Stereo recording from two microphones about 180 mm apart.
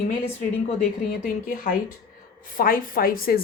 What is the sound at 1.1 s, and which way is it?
Speech, 50° left (ahead or behind).